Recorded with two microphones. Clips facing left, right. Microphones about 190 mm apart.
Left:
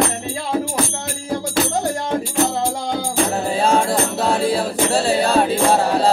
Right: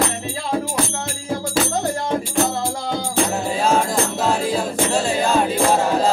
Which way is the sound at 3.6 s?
35° left (ahead or behind).